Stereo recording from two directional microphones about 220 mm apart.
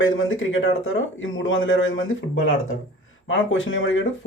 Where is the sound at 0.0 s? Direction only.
65° left (ahead or behind).